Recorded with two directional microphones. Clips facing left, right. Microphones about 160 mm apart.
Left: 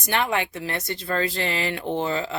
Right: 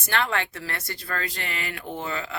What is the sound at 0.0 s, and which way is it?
Speech, 15° left (ahead or behind).